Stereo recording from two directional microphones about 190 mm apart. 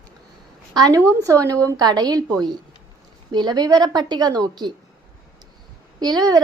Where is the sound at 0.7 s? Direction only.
20° right (ahead or behind).